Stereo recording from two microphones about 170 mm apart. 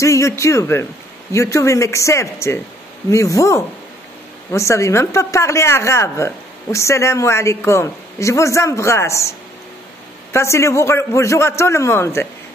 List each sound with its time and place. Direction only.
0.0 s a woman's voice: 15° left (ahead or behind)
10.3 s a woman's voice: 15° left (ahead or behind)